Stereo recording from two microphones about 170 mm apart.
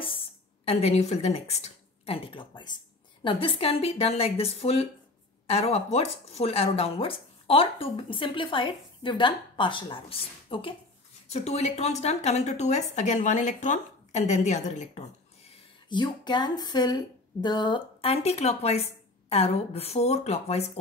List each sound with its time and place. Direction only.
0.7 s speech: 40° left (ahead or behind)